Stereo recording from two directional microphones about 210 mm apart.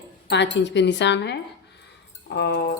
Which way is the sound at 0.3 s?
55° left (ahead or behind).